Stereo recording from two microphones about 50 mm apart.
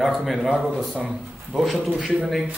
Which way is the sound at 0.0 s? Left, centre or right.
Centre.